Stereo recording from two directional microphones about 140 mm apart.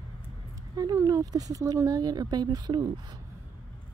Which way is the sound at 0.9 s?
20° right (ahead or behind).